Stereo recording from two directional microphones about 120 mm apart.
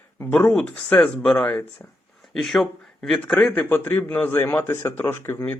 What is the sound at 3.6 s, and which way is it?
Speech, 15° left (ahead or behind).